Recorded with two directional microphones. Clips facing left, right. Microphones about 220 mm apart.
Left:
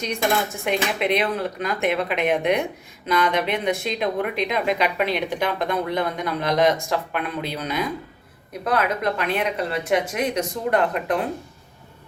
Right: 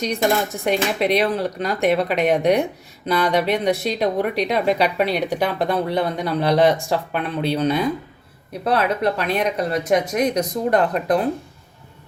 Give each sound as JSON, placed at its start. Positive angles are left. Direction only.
{"t": 0.0, "sound": "a woman's voice", "side_deg": -35}